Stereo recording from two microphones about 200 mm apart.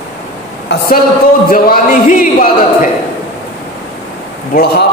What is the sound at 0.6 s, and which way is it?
A woman's voice, 50° left (ahead or behind).